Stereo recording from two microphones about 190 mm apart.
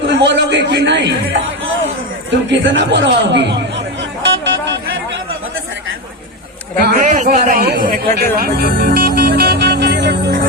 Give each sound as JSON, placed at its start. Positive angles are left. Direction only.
{"t": 0.1, "sound": "a man's voice", "side_deg": -65}
{"t": 2.5, "sound": "speech", "side_deg": -70}
{"t": 4.2, "sound": "a sound", "side_deg": -70}
{"t": 6.8, "sound": "a man's voice", "side_deg": -45}